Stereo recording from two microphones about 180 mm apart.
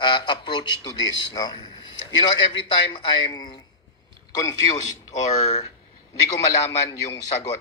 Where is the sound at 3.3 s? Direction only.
25° left (ahead or behind).